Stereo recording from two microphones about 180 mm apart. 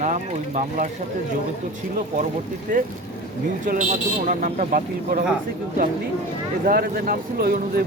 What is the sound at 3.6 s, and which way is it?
Speech, 45° right (ahead or behind).